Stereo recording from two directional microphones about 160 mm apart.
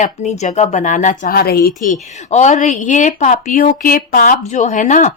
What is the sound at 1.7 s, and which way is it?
A woman's voice, 50° left (ahead or behind).